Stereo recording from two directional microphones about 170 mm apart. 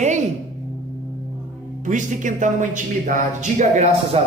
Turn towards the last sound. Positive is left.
turn(degrees=-45)  # may be behind; listen again after turning